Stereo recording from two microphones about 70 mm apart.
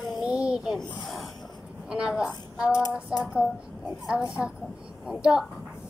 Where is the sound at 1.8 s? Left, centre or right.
Centre.